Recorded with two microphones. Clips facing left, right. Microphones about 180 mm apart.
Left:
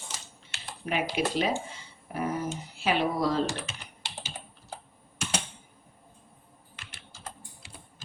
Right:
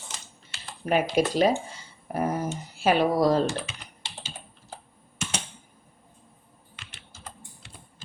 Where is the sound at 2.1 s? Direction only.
45° right (ahead or behind).